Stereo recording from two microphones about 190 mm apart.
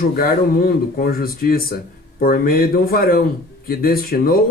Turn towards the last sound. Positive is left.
turn(degrees=50)  # may be behind; listen again after turning